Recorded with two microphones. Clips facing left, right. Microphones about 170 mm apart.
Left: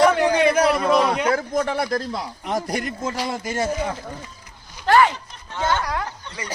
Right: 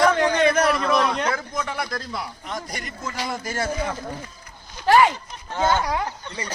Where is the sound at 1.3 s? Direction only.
45° left (ahead or behind).